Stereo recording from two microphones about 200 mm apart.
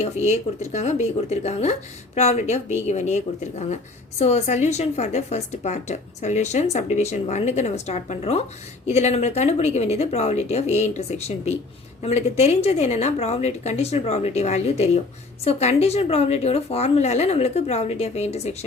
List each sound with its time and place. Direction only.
0.0 s a woman's voice: 35° left (ahead or behind)